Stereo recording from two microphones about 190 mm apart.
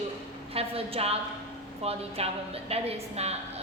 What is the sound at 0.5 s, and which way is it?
A woman's voice, 30° right (ahead or behind).